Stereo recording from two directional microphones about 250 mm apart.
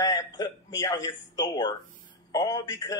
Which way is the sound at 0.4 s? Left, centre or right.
Centre.